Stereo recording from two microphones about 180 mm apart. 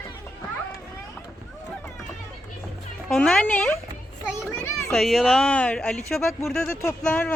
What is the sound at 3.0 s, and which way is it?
A child's voice, 5° left (ahead or behind).